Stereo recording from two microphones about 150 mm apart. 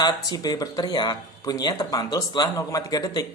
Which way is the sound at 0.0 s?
25° left (ahead or behind).